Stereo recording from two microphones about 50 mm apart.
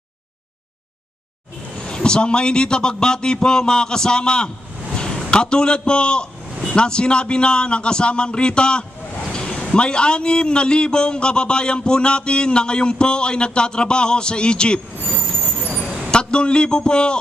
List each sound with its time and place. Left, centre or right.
1.8 s a man's voice: centre
4.9 s a sound: centre
5.3 s a man's voice: centre
16.1 s a man's voice: centre